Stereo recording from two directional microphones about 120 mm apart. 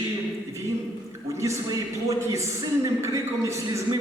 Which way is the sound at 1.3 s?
25° right (ahead or behind).